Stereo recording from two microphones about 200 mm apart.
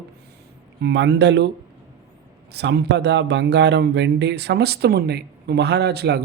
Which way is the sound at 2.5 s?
60° right (ahead or behind).